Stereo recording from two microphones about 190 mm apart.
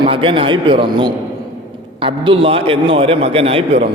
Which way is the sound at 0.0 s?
25° right (ahead or behind).